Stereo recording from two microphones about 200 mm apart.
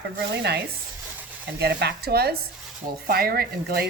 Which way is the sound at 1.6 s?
55° right (ahead or behind).